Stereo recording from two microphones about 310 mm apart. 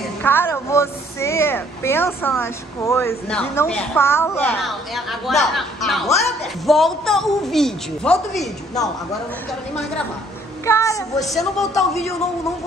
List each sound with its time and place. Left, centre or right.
0.2 s speech: centre
10.6 s speech: centre